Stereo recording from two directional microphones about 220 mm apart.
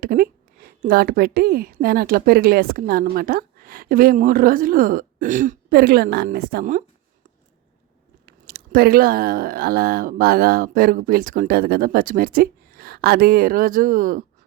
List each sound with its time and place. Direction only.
0.0 s a woman's voice: 40° right (ahead or behind)
8.3 s speech: 40° right (ahead or behind)